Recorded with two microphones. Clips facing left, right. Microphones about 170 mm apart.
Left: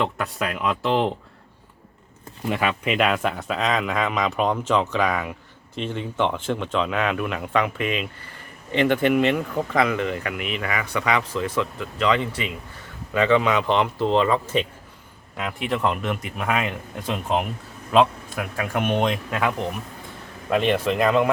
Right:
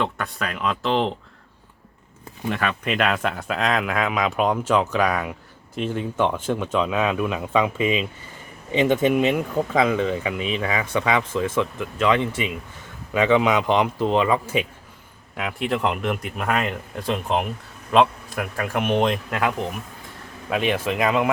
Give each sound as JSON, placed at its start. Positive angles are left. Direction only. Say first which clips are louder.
{"t": 0.0, "sound": "speech", "louder": "left 1 dB", "side_deg": 5}
{"t": 2.5, "sound": "speech", "louder": "left 1 dB", "side_deg": 5}